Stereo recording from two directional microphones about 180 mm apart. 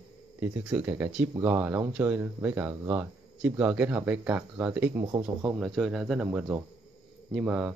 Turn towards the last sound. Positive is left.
turn(degrees=-5)  # may be behind; listen again after turning